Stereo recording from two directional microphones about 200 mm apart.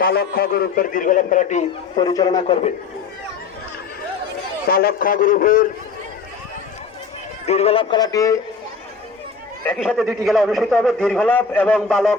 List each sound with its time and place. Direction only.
0.0 s a man's voice: 50° left (ahead or behind)
2.0 s a man's voice: 20° left (ahead or behind)
4.7 s a man's voice: 50° left (ahead or behind)
7.4 s a man's voice: 30° left (ahead or behind)
9.6 s a man's voice: centre (ahead or behind)